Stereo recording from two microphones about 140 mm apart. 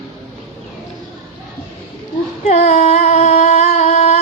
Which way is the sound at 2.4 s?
55° left (ahead or behind).